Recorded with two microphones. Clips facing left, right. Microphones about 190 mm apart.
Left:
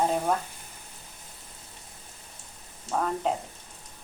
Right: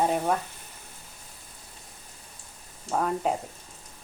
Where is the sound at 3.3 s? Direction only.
10° right (ahead or behind).